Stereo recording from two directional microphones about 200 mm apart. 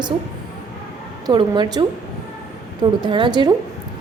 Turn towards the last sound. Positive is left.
turn(degrees=-20)  # may be behind; listen again after turning